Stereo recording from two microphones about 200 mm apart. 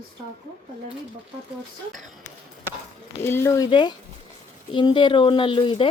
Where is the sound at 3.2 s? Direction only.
10° left (ahead or behind).